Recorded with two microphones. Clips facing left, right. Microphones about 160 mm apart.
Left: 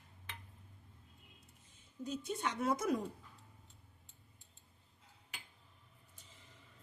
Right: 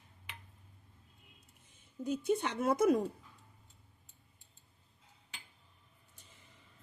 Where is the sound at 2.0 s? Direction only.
55° right (ahead or behind).